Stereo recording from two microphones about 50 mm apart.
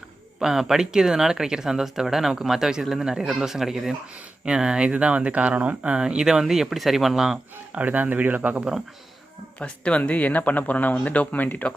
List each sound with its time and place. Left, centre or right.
0.3 s speech: centre
7.7 s speech: right
9.6 s speech: left